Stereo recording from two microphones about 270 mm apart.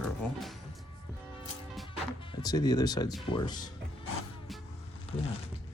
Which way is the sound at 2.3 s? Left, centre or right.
Centre.